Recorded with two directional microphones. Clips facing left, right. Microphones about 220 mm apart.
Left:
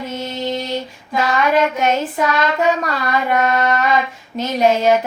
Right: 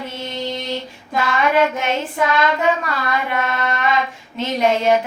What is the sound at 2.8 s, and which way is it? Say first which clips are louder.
Music: left 3 dB; 40° left (ahead or behind).